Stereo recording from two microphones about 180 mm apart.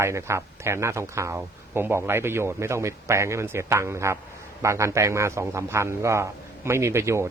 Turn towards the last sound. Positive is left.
turn(degrees=-15)  # may be behind; listen again after turning